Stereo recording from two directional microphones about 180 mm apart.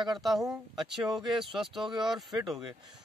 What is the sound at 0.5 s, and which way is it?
Speech, centre (ahead or behind).